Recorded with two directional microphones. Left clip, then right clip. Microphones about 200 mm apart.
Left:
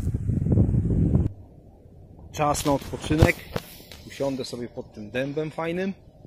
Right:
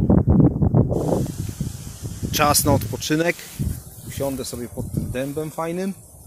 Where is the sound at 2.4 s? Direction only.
20° right (ahead or behind); by 5.9 s 5° right (ahead or behind).